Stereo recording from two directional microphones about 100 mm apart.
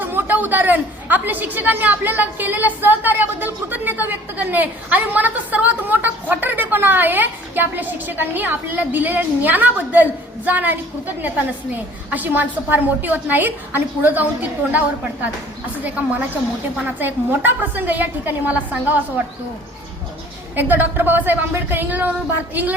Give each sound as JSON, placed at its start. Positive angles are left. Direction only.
{"t": 0.0, "sound": "a woman's voice", "side_deg": -20}
{"t": 20.6, "sound": "a woman's voice", "side_deg": -20}